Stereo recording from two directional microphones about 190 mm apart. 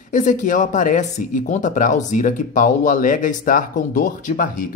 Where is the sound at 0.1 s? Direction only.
40° left (ahead or behind).